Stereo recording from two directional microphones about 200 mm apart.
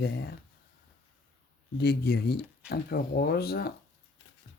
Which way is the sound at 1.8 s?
55° left (ahead or behind).